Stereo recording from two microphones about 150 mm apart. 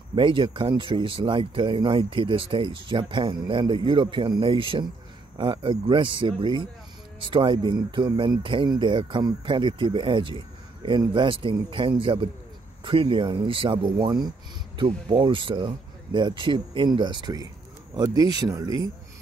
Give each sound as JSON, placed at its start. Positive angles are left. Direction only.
{"t": 0.1, "sound": "speech", "side_deg": -35}